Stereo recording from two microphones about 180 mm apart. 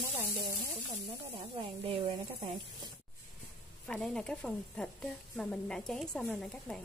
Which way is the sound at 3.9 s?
5° left (ahead or behind).